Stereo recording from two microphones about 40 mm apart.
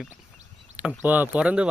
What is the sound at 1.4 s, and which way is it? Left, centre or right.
Speech, right.